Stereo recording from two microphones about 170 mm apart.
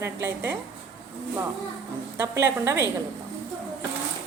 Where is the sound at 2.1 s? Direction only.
15° right (ahead or behind).